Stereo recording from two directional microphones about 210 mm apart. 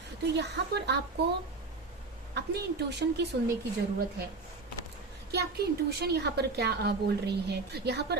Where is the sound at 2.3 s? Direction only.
55° right (ahead or behind).